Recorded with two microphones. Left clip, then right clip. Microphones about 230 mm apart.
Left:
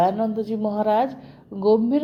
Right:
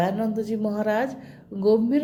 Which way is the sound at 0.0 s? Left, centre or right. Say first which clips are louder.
Left 4 dB; left.